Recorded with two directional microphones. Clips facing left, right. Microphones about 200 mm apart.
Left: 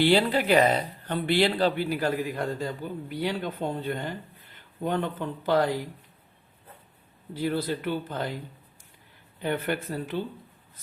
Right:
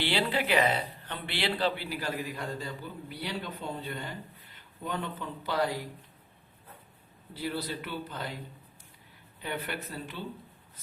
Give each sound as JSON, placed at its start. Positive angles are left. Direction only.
{"t": 0.0, "sound": "speech", "side_deg": 45}
{"t": 7.3, "sound": "speech", "side_deg": 50}
{"t": 9.4, "sound": "speech", "side_deg": 50}